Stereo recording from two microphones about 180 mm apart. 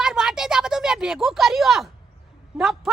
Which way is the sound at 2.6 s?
Centre (ahead or behind).